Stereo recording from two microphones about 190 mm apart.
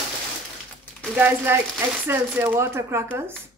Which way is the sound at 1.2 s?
10° right (ahead or behind).